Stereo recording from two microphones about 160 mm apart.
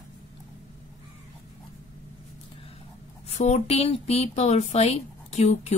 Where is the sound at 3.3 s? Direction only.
45° left (ahead or behind).